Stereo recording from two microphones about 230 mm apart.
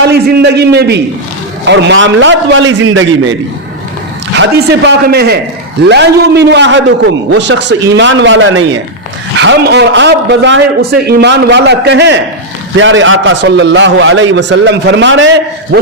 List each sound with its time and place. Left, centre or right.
0.0 s a man's voice: right
4.4 s a man's voice: right